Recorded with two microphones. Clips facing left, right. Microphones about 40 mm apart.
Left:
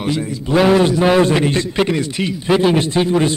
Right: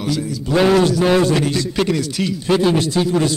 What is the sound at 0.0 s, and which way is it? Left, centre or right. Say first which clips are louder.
Speech: left 1 dB; left.